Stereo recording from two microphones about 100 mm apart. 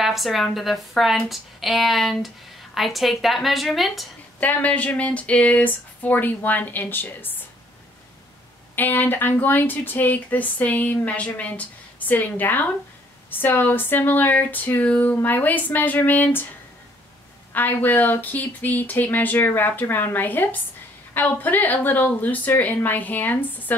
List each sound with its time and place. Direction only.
0.0 s speech: centre (ahead or behind)
4.4 s speech: 15° left (ahead or behind)
8.7 s speech: 20° left (ahead or behind)
17.5 s speech: 20° left (ahead or behind)